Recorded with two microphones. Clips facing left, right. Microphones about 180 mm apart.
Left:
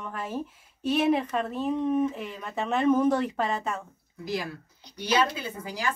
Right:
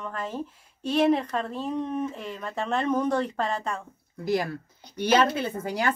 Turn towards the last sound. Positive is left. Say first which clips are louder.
# right 6 dB
turn(degrees=-60)  # may be behind; listen again after turning